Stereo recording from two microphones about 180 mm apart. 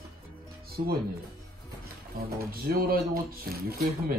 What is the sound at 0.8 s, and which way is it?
Speech, 40° right (ahead or behind).